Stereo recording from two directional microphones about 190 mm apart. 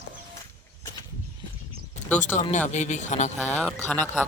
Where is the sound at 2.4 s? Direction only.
40° left (ahead or behind).